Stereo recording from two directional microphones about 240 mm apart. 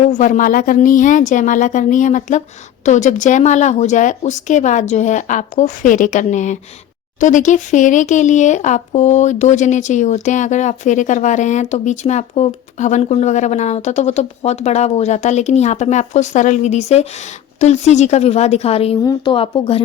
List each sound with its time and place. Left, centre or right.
0.0 s speech: left